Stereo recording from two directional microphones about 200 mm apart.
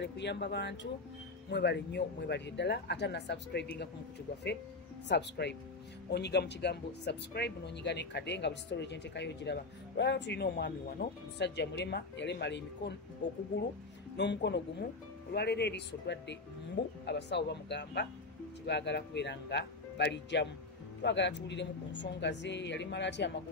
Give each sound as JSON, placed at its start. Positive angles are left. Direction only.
{"t": 0.0, "sound": "speech", "side_deg": 60}
{"t": 5.0, "sound": "speech", "side_deg": 60}